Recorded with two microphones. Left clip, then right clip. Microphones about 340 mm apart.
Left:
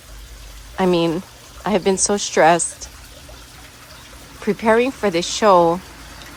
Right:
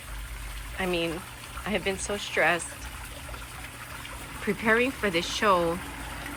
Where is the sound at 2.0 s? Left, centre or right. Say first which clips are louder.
Left 11 dB; centre.